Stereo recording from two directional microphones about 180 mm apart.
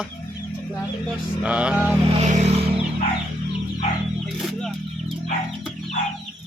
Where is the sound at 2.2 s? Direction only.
40° right (ahead or behind).